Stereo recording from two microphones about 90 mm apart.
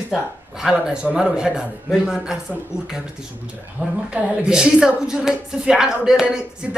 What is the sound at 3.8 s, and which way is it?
Speech, 15° right (ahead or behind).